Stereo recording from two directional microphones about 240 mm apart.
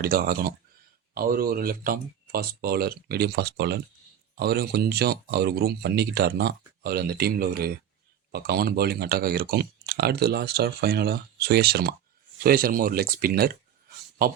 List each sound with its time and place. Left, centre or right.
0.0 s speech: right